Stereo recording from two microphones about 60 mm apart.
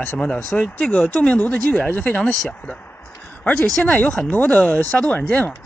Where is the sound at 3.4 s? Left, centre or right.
Left.